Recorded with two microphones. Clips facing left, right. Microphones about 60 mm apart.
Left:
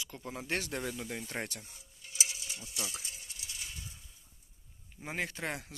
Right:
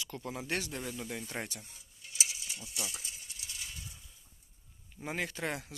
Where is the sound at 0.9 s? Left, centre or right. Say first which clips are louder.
Even; left.